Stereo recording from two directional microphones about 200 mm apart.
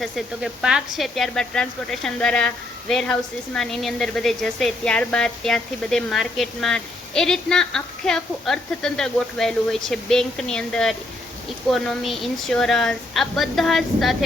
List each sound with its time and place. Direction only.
0.0 s speech: centre (ahead or behind)